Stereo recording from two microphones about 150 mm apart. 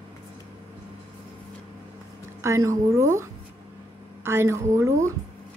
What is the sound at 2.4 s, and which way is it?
A woman's voice, 20° right (ahead or behind).